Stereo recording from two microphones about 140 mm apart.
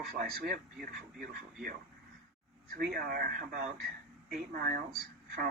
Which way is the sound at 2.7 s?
90° right.